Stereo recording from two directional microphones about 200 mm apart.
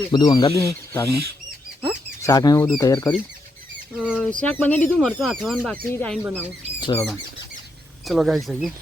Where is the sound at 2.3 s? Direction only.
15° left (ahead or behind).